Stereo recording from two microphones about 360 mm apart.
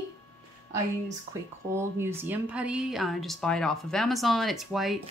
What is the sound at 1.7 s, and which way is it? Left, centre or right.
A woman's voice, centre.